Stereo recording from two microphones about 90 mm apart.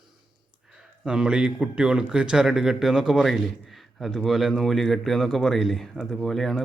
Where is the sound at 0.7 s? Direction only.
5° right (ahead or behind).